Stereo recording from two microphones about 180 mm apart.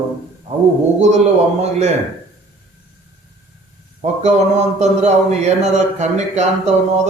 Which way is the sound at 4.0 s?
40° right (ahead or behind).